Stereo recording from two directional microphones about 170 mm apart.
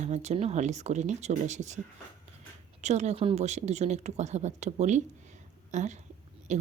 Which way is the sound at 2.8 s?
40° right (ahead or behind).